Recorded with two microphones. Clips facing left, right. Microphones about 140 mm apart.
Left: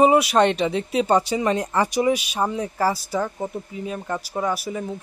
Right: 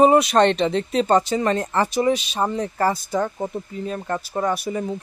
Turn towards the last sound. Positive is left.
turn(degrees=0)  # may be behind; listen again after turning